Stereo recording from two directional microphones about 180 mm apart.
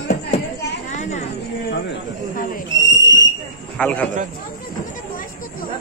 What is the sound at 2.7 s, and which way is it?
Whistle, 85° left.